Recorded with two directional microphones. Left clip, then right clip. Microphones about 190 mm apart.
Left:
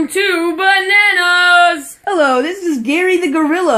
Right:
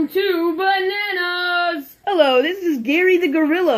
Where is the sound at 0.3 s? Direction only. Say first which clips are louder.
Left 7 dB; 45° right (ahead or behind).